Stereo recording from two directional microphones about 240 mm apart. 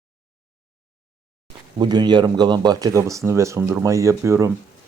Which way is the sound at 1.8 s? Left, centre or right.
Centre.